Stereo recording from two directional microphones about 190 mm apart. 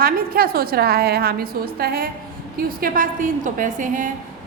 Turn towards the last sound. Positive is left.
turn(degrees=-45)  # may be behind; listen again after turning